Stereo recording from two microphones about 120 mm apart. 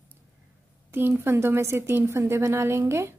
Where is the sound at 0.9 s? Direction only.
20° right (ahead or behind).